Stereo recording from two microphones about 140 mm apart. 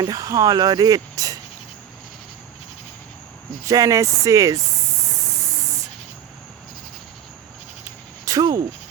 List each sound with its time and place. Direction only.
0.0 s speech: 25° right (ahead or behind)
3.6 s speech: 20° right (ahead or behind)
8.2 s insect: 25° right (ahead or behind)